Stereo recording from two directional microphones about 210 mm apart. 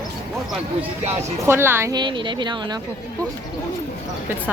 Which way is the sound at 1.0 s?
10° right (ahead or behind).